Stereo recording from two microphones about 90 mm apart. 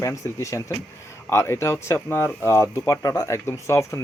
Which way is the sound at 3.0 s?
40° left (ahead or behind).